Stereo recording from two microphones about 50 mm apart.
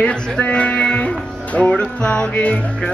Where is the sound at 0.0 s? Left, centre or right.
Left.